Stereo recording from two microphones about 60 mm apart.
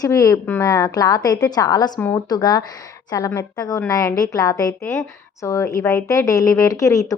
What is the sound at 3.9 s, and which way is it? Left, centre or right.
Speech, left.